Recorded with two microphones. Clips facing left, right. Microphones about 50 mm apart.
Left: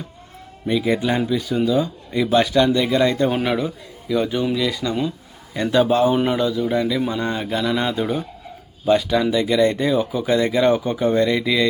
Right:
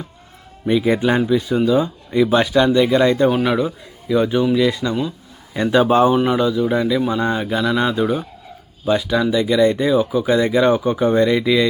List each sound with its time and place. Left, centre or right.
0.7 s speech: centre
2.1 s speech: centre
3.2 s speech: centre
4.1 s speech: centre
5.8 s speech: right
6.1 s speech: centre